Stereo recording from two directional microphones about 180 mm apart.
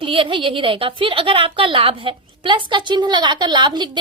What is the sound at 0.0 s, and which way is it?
A woman's voice, 30° right (ahead or behind).